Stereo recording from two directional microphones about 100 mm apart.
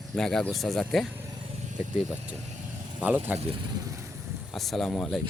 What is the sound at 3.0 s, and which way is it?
Speech, 15° right (ahead or behind).